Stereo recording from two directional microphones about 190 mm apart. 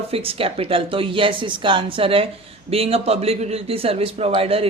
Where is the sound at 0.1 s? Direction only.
30° right (ahead or behind).